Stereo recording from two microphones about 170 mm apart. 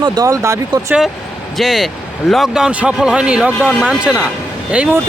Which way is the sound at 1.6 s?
Centre (ahead or behind).